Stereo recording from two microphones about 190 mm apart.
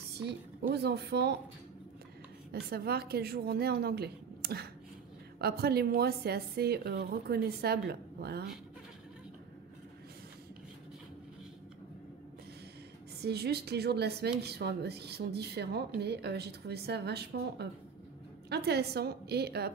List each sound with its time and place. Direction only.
0.1 s a woman's voice: 60° right (ahead or behind)
2.7 s a woman's voice: 55° right (ahead or behind)
13.2 s a woman's voice: 60° right (ahead or behind)